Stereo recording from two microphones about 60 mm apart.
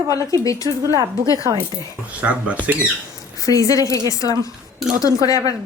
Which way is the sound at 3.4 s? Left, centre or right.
Left.